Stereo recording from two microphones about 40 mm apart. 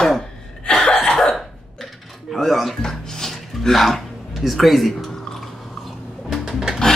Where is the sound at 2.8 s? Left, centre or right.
Centre.